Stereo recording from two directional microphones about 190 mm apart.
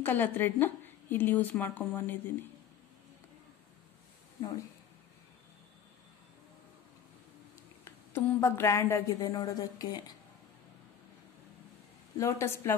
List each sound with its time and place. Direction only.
0.0 s speech: 10° left (ahead or behind)
7.8 s speech: 15° left (ahead or behind)
12.2 s speech: 15° left (ahead or behind)